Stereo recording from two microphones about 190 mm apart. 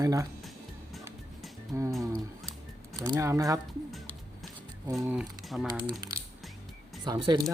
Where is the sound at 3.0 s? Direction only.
20° right (ahead or behind).